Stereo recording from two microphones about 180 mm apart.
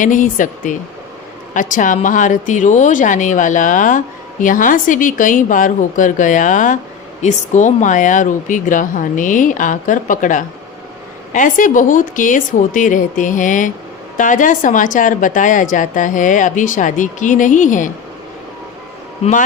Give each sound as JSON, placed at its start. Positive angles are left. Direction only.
{"t": 0.0, "sound": "speech", "side_deg": 45}
{"t": 19.2, "sound": "speech", "side_deg": 45}